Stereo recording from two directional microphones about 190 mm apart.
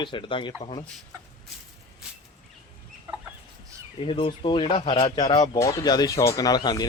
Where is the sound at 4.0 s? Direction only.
30° left (ahead or behind).